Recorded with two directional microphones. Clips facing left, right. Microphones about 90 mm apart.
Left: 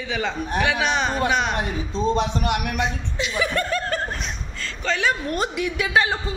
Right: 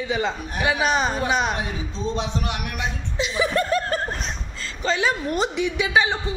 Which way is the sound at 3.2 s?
25° right (ahead or behind).